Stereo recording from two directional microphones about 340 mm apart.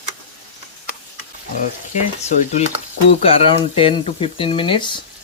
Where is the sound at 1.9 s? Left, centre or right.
Left.